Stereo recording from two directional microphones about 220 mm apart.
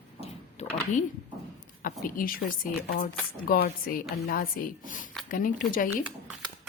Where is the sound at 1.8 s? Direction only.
40° left (ahead or behind).